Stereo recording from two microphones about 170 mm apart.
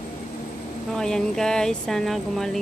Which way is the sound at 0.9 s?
5° left (ahead or behind).